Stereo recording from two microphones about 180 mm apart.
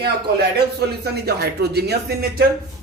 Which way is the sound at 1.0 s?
65° right (ahead or behind).